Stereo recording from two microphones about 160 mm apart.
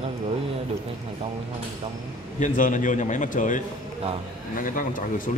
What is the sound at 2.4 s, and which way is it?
Speech, 55° left (ahead or behind).